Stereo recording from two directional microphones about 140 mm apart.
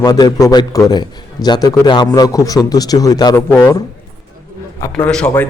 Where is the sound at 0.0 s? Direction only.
25° left (ahead or behind).